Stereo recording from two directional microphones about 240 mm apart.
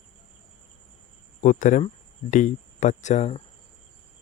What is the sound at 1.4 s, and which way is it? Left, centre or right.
Speech, left.